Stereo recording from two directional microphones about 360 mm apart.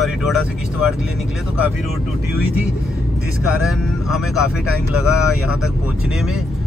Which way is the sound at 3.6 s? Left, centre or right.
Centre.